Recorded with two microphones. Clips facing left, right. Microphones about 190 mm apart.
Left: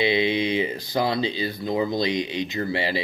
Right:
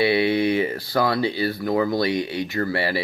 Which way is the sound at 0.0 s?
20° left (ahead or behind).